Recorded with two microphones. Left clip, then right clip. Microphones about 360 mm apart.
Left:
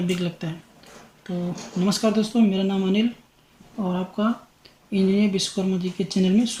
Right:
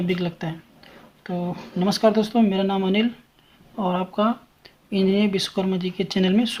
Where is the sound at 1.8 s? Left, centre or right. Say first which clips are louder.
Right 4 dB; centre.